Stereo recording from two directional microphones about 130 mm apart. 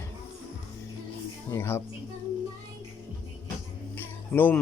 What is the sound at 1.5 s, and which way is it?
Speech, 20° left (ahead or behind).